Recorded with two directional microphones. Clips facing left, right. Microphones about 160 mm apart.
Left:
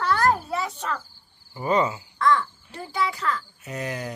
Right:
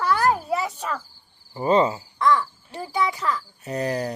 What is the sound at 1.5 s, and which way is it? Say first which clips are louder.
Speech: right 4 dB; 30° right (ahead or behind).